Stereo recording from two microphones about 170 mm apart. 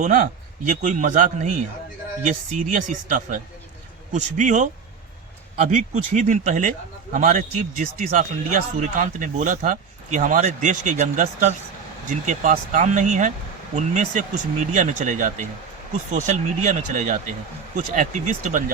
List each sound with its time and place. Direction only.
0.0 s speech: 50° right (ahead or behind)